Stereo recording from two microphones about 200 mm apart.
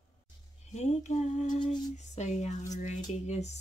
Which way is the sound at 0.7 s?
35° left (ahead or behind).